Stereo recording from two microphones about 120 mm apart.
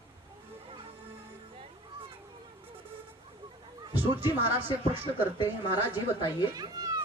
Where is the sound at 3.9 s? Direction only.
15° right (ahead or behind).